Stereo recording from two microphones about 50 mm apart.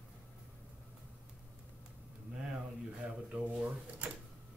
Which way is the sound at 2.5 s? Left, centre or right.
Right.